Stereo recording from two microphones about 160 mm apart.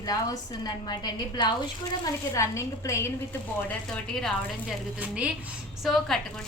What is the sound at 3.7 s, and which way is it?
Speech, 5° left (ahead or behind).